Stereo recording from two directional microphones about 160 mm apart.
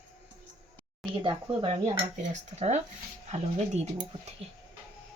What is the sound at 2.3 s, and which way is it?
Cutlery, 45° right (ahead or behind).